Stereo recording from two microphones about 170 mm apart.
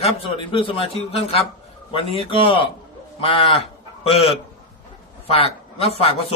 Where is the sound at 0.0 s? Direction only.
30° left (ahead or behind).